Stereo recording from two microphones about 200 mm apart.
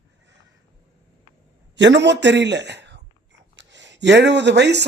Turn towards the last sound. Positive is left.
turn(degrees=-60)  # may be behind; listen again after turning